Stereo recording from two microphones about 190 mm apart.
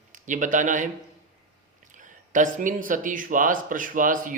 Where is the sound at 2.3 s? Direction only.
45° right (ahead or behind).